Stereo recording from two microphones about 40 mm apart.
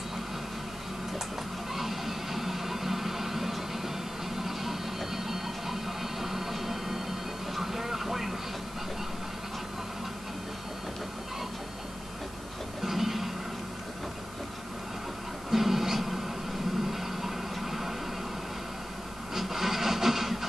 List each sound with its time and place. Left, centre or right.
1.7 s a sound: centre
4.4 s music: centre
7.5 s vehicle: centre
12.8 s music: centre
15.5 s music: centre
19.3 s printer: centre